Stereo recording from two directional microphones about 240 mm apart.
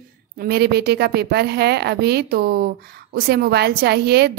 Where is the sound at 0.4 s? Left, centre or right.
Right.